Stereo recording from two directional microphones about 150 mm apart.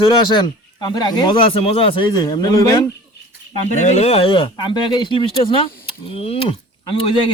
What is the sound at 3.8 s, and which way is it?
Speech, 50° left (ahead or behind).